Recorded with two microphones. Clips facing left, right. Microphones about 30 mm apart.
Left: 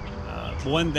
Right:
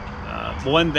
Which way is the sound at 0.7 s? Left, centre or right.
Right.